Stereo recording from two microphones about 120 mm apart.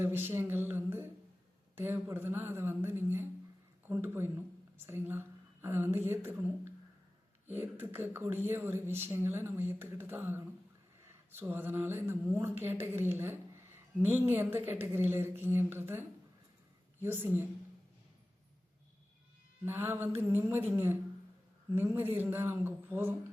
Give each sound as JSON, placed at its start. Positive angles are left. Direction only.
{"t": 0.0, "sound": "a woman's voice", "side_deg": -20}
{"t": 7.4, "sound": "a woman's voice", "side_deg": -20}
{"t": 19.6, "sound": "a woman's voice", "side_deg": -20}